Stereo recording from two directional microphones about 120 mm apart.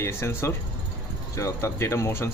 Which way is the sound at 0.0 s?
20° left (ahead or behind).